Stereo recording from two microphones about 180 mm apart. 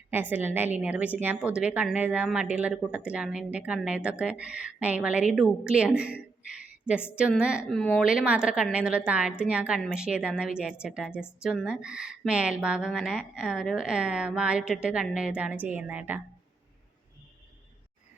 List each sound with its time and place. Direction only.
0.1 s speech: 10° right (ahead or behind)
7.2 s a woman's voice: 5° right (ahead or behind)